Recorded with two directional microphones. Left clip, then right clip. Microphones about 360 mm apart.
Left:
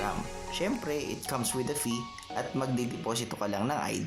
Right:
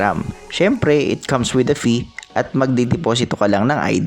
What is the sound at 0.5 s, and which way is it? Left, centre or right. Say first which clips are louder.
Speech: right 17 dB; left.